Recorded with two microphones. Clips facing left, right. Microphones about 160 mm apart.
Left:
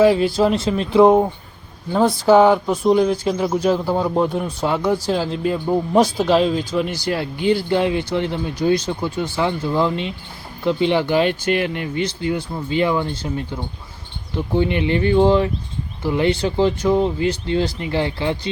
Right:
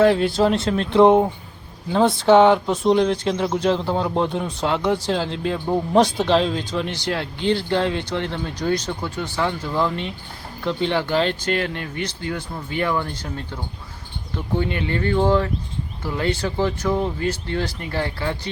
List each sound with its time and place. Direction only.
0.0 s speech: 5° left (ahead or behind)